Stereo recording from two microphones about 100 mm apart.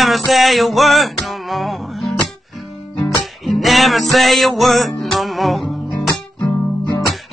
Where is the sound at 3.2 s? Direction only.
Centre (ahead or behind).